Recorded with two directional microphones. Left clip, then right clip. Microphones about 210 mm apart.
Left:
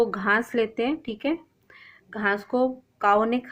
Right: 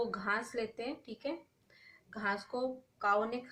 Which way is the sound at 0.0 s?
35° left (ahead or behind).